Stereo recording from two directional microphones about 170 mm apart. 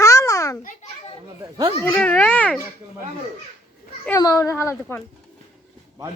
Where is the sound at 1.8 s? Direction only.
10° left (ahead or behind).